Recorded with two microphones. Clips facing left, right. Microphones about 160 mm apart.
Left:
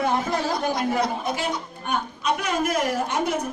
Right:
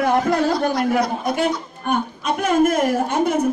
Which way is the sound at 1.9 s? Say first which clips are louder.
Right 4 dB; 50° right (ahead or behind).